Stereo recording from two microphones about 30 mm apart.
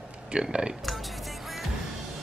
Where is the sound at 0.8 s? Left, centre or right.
Centre.